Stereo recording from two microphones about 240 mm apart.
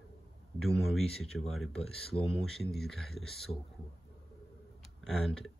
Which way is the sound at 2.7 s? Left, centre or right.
Centre.